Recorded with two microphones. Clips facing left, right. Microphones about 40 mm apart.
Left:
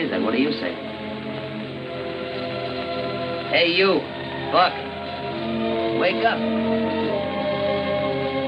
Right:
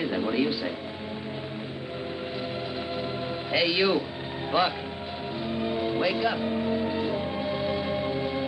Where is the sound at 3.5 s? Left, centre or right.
Left.